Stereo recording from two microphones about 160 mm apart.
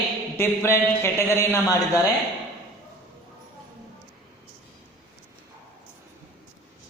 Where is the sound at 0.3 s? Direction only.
15° left (ahead or behind).